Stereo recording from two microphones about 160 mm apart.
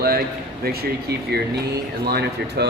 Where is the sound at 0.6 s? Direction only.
75° right (ahead or behind).